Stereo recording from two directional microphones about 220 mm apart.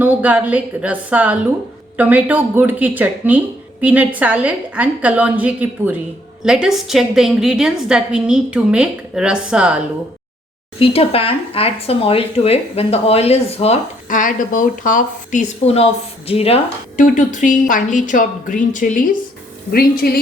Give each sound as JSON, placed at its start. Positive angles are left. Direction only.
{"t": 0.0, "sound": "a woman's voice", "side_deg": -10}
{"t": 10.8, "sound": "speech", "side_deg": 25}